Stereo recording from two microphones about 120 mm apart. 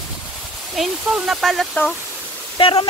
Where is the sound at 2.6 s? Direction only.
50° left (ahead or behind).